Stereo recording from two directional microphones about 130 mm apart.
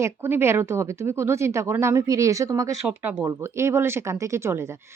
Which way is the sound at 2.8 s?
15° right (ahead or behind).